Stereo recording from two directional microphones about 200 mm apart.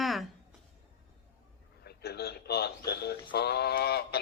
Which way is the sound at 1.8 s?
50° left (ahead or behind).